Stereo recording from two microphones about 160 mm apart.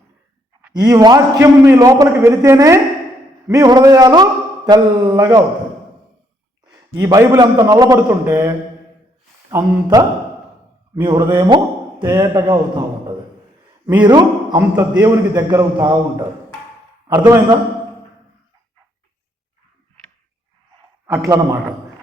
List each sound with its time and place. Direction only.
0.7 s a man's voice: 25° right (ahead or behind)
6.7 s a sound: 25° right (ahead or behind)
7.3 s a man's voice: 25° right (ahead or behind)
9.8 s a man's voice: 25° right (ahead or behind)
11.1 s a man's voice: 20° right (ahead or behind)
13.8 s a man's voice: 25° right (ahead or behind)
14.6 s a man's voice: 15° right (ahead or behind)
17.2 s a man's voice: 20° right (ahead or behind)
21.1 s a man's voice: 20° right (ahead or behind)